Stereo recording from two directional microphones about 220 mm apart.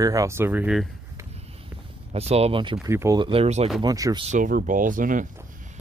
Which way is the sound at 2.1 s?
25° right (ahead or behind).